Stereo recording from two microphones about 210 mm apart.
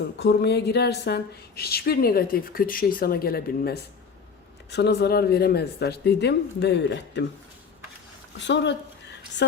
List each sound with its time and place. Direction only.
0.2 s a woman's voice: 55° left (ahead or behind)
8.4 s speech: 60° left (ahead or behind)